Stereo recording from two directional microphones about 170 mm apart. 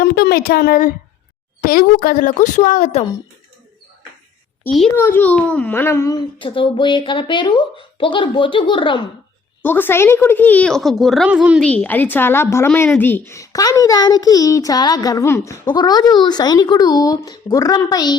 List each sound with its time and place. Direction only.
0.0 s a woman's voice: 70° left (ahead or behind); by 3.0 s 50° left (ahead or behind)
4.9 s speech: 10° left (ahead or behind)
6.4 s a woman's voice: 30° left (ahead or behind)
9.6 s speech: 10° left (ahead or behind); by 11.6 s 5° right (ahead or behind)
11.6 s a woman's voice: 10° left (ahead or behind); by 18.2 s 25° left (ahead or behind)